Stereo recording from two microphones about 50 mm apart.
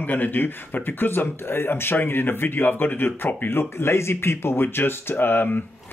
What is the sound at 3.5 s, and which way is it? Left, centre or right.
Speech, left.